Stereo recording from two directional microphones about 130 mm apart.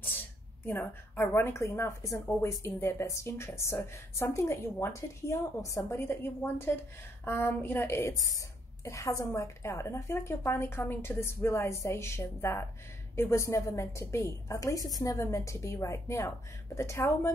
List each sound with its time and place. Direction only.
0.7 s a woman's voice: 15° left (ahead or behind)